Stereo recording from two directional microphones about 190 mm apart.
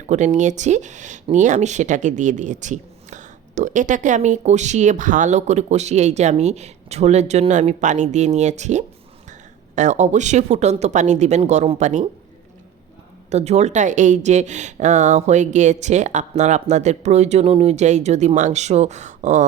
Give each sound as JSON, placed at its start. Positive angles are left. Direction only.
{"t": 0.1, "sound": "speech", "side_deg": -40}
{"t": 13.3, "sound": "speech", "side_deg": -35}